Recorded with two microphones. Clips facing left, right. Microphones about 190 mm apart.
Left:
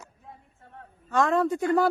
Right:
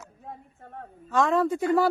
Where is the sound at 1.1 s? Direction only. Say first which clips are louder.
Even; centre (ahead or behind).